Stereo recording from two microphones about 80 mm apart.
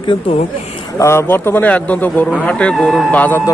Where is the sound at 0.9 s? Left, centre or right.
Left.